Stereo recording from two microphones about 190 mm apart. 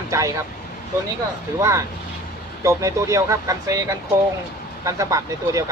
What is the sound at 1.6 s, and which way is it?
Speech, 15° right (ahead or behind).